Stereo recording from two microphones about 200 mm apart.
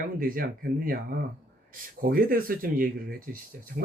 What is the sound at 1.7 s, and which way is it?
Speech, 45° right (ahead or behind).